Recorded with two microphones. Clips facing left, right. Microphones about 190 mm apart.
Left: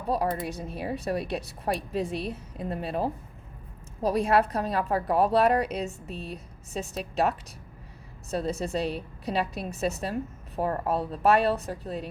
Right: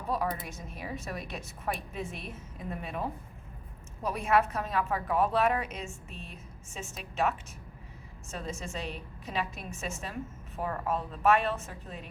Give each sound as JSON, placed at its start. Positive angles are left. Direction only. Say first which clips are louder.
{"t": 0.1, "sound": "a woman's voice", "louder": "left 5 dB", "side_deg": 30}